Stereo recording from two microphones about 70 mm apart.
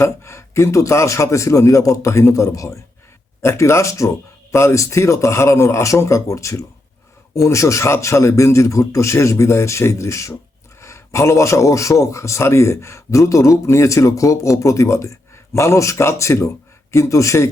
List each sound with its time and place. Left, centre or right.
0.0 s a man's voice: left